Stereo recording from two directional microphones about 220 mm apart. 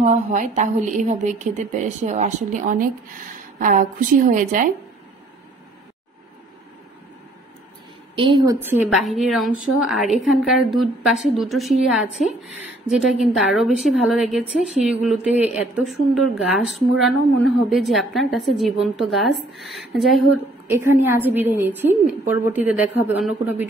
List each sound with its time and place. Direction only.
0.0 s a woman's voice: 35° right (ahead or behind)
8.2 s a woman's voice: 20° right (ahead or behind)
8.5 s a woman's voice: 5° right (ahead or behind)
12.2 s a woman's voice: 35° left (ahead or behind)
12.5 s a woman's voice: 5° right (ahead or behind)
20.6 s a woman's voice: 10° right (ahead or behind)